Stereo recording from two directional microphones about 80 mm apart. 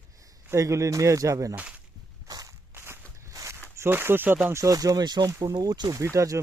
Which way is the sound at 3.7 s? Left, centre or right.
Right.